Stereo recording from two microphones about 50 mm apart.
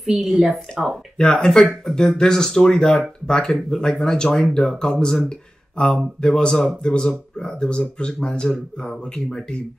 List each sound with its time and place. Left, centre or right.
0.0 s a woman's voice: centre
1.1 s speech: centre
6.2 s speech: centre